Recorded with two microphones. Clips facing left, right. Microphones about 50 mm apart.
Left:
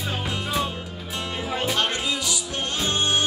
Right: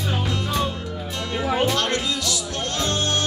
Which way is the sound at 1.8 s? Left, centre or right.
Centre.